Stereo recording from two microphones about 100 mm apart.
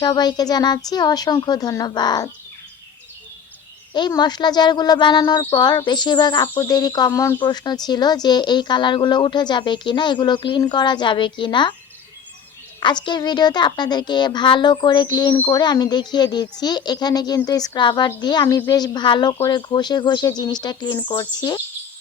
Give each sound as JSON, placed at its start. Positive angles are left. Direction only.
{"t": 0.0, "sound": "speech", "side_deg": 45}
{"t": 4.2, "sound": "a woman's voice", "side_deg": 45}
{"t": 7.3, "sound": "speech", "side_deg": 45}
{"t": 12.8, "sound": "speech", "side_deg": 50}
{"t": 18.4, "sound": "a woman's voice", "side_deg": 35}